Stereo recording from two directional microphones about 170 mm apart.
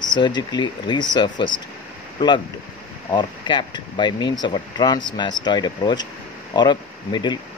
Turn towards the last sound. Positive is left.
turn(degrees=25)  # may be behind; listen again after turning